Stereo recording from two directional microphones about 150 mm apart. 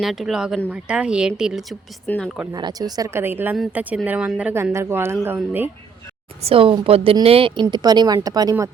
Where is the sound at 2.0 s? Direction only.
10° left (ahead or behind).